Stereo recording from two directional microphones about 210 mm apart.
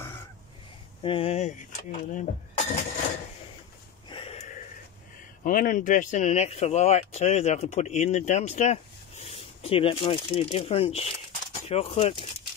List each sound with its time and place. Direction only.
1.0 s speech: 25° left (ahead or behind)
4.1 s a sound: 25° left (ahead or behind)
5.4 s speech: 40° left (ahead or behind)